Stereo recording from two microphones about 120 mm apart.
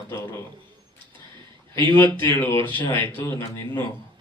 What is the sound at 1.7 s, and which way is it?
Speech, 20° left (ahead or behind).